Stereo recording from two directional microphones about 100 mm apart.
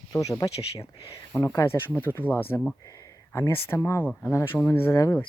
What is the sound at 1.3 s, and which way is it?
Speech, 35° left (ahead or behind).